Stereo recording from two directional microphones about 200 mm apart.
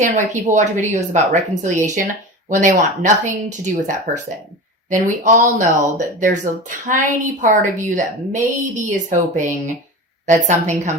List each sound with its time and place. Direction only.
0.0 s a woman's voice: 40° right (ahead or behind)
4.9 s a woman's voice: 40° right (ahead or behind)